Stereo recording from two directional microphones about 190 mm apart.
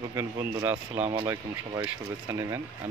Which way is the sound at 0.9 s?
35° right (ahead or behind).